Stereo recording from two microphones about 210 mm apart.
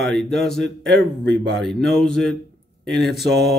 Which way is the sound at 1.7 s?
Centre (ahead or behind).